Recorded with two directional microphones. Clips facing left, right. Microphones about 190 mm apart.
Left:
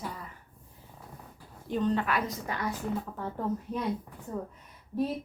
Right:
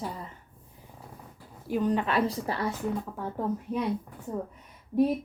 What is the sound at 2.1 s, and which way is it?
Speech, 30° right (ahead or behind).